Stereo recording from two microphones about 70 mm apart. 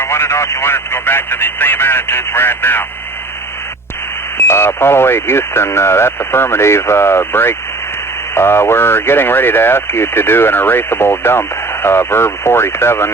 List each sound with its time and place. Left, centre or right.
0.0 s speech: left
4.4 s speech: left